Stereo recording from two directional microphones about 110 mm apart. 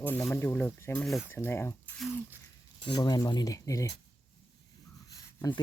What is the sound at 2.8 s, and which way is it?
Speech, 40° left (ahead or behind).